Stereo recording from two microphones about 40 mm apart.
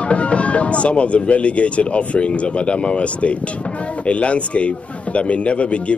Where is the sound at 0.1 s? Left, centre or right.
Left.